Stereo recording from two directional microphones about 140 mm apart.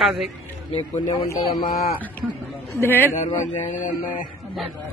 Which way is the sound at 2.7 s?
15° left (ahead or behind).